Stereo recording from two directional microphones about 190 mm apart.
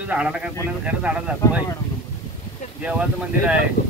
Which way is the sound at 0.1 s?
5° right (ahead or behind).